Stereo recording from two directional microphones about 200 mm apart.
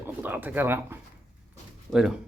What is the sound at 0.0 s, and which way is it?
Speech, 10° right (ahead or behind).